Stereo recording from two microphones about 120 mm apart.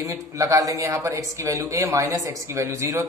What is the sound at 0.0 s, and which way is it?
Speech, 25° right (ahead or behind).